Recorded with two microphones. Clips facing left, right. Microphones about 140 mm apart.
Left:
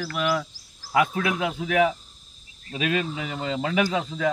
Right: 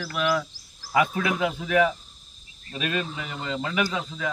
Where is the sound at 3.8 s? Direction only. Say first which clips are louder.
Left 4 dB; 55° left (ahead or behind).